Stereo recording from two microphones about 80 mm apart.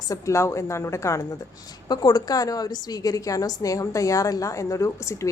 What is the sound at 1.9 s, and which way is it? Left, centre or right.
A woman's voice, left.